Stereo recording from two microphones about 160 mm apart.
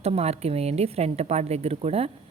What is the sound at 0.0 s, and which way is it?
A woman's voice, 40° right (ahead or behind).